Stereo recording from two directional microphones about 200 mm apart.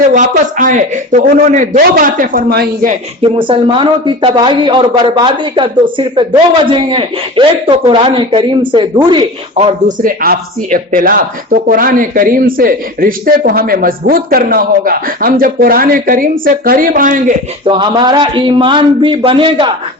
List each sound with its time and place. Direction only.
0.1 s a man's voice: 40° right (ahead or behind)
3.2 s speech: 25° right (ahead or behind)
10.0 s speech: 45° right (ahead or behind)
17.7 s speech: 25° right (ahead or behind)